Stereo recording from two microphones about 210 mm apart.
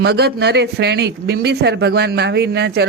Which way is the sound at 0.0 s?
50° right (ahead or behind).